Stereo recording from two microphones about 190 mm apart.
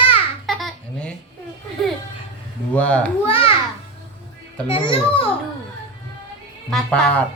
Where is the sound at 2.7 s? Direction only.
5° left (ahead or behind).